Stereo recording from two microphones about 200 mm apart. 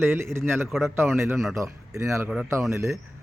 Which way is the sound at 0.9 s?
10° right (ahead or behind).